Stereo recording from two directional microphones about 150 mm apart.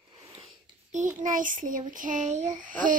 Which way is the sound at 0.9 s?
60° right (ahead or behind).